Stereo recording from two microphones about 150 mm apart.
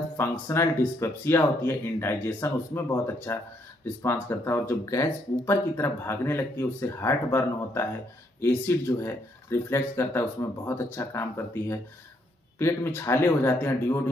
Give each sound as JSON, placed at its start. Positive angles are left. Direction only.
{"t": 0.2, "sound": "speech", "side_deg": 15}